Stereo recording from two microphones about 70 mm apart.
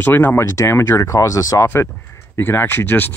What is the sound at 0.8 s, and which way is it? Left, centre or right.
Speech, left.